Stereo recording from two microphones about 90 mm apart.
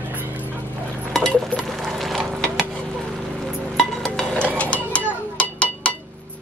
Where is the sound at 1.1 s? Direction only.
5° left (ahead or behind).